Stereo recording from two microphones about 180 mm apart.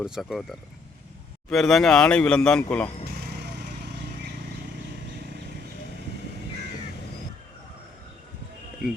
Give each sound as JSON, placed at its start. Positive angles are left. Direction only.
{"t": 0.0, "sound": "a man's voice", "side_deg": 0}
{"t": 1.5, "sound": "a man's voice", "side_deg": 0}
{"t": 3.4, "sound": "vehicle", "side_deg": -65}